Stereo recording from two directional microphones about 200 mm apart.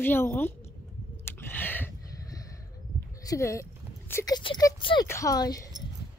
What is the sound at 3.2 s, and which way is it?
Speech, 15° left (ahead or behind).